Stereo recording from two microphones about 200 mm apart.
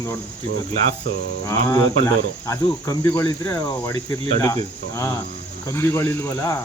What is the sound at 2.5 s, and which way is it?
Cricket, 15° left (ahead or behind).